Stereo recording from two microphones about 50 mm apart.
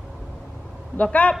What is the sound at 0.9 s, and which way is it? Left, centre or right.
Speech, left.